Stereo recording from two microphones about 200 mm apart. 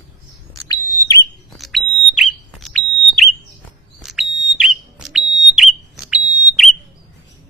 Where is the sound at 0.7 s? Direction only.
15° left (ahead or behind).